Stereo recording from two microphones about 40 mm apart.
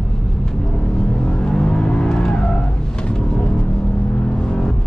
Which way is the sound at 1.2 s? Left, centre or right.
Centre.